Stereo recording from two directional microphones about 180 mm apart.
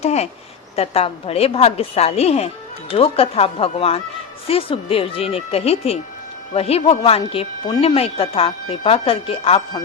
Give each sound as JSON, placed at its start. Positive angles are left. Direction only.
{"t": 0.0, "sound": "speech", "side_deg": 35}